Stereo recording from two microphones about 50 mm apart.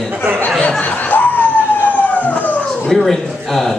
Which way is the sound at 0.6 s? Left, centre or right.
Left.